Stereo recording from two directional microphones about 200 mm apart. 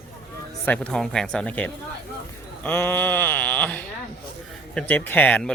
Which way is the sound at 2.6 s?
10° left (ahead or behind).